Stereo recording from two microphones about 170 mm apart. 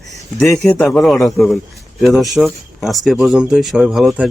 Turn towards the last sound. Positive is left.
turn(degrees=-5)  # may be behind; listen again after turning